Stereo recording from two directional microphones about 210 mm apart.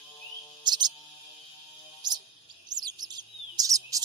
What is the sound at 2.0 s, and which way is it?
Music, 20° right (ahead or behind).